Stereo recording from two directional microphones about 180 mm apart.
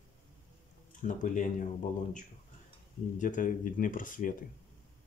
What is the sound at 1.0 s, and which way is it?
Speech, 45° left (ahead or behind).